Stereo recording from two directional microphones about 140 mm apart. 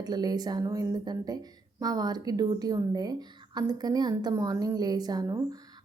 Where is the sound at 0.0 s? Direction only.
30° right (ahead or behind).